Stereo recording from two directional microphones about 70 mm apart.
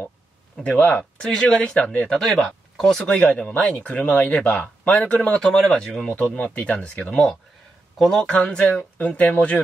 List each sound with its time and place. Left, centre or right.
0.7 s speech: centre
3.1 s speech: centre
6.0 s speech: centre
8.4 s speech: centre